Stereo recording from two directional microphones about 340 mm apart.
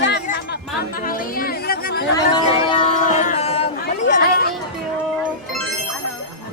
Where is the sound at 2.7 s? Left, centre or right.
Left.